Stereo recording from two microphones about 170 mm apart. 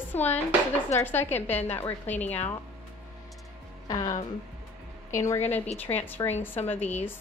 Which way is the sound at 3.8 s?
20° left (ahead or behind).